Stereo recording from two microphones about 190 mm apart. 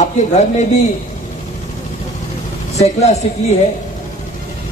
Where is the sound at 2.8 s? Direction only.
35° left (ahead or behind).